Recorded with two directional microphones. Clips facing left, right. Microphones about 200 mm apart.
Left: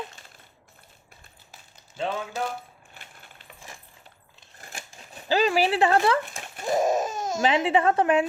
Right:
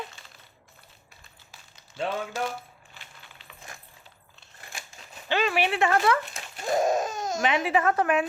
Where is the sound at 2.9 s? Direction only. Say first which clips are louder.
Left 1 dB; 50° left (ahead or behind).